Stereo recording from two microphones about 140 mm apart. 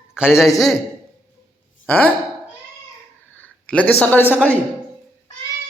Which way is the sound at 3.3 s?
10° left (ahead or behind).